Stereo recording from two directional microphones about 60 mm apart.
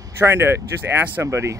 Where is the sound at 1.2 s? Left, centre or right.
Right.